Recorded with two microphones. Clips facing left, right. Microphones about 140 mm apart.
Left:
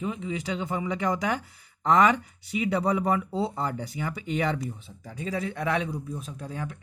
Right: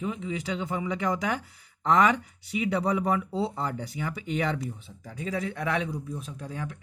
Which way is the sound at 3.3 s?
40° left (ahead or behind).